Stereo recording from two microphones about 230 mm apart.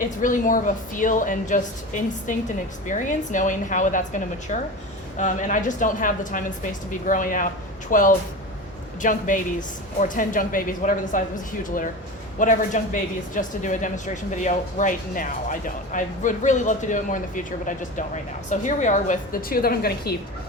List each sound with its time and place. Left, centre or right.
0.2 s speech: left
12.4 s speech: left